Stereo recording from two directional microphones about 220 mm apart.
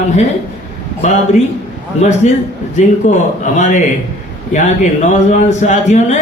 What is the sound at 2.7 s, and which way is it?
A man's voice, 35° left (ahead or behind).